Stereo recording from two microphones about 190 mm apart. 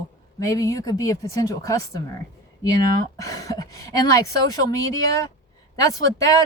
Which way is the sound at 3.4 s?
20° left (ahead or behind).